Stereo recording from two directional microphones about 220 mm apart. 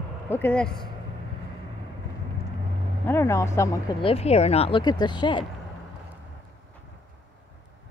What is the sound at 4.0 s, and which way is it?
Speech, 25° left (ahead or behind).